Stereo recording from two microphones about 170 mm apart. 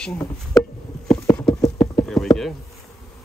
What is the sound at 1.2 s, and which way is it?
Clip-clop, 20° left (ahead or behind).